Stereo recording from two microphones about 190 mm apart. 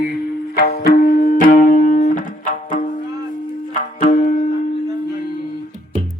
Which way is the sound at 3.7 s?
40° left (ahead or behind).